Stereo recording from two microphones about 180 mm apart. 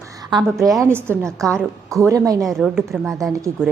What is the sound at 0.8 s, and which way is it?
A woman's voice, 15° right (ahead or behind).